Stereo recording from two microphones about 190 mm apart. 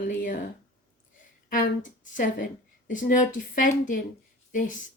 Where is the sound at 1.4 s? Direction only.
45° left (ahead or behind).